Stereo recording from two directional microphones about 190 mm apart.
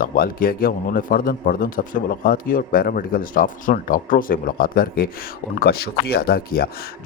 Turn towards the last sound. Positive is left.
turn(degrees=55)  # may be behind; listen again after turning